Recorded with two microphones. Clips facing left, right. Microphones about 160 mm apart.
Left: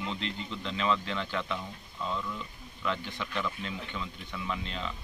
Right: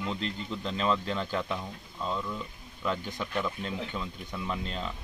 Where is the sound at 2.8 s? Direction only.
40° right (ahead or behind).